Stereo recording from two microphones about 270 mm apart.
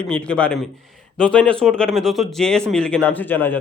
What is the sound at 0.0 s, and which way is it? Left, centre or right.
Speech, centre.